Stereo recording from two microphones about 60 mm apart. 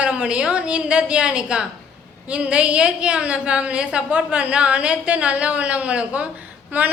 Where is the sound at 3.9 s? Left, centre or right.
Centre.